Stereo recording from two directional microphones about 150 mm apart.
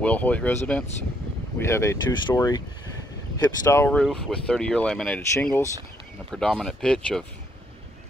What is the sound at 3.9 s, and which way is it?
Speech, 5° left (ahead or behind).